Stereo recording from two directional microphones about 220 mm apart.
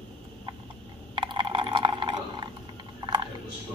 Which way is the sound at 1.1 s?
20° right (ahead or behind).